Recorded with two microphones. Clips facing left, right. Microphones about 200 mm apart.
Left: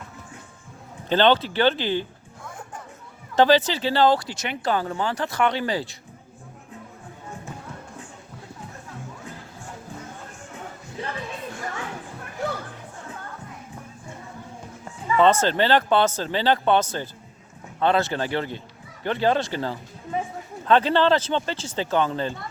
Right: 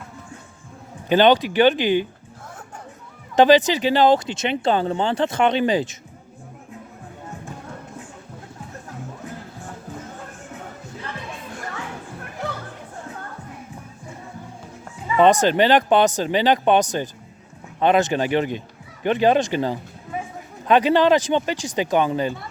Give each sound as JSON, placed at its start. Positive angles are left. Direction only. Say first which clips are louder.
{"t": 1.0, "sound": "speech", "louder": "right 4 dB", "side_deg": -15}
{"t": 3.3, "sound": "speech", "louder": "right 4 dB", "side_deg": -15}
{"t": 15.1, "sound": "speech", "louder": "right 3 dB", "side_deg": -15}